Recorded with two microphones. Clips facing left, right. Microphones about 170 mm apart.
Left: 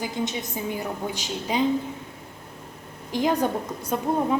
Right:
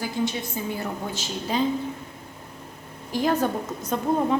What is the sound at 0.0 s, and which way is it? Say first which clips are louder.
A woman's voice: right 1 dB; 20° left (ahead or behind).